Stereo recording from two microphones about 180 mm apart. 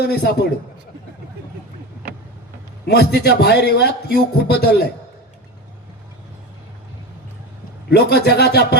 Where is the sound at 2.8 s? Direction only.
65° left (ahead or behind).